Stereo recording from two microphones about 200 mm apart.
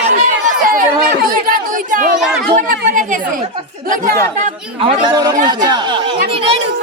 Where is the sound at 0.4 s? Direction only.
45° right (ahead or behind).